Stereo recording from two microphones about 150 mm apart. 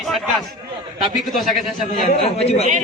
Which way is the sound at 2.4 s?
40° left (ahead or behind).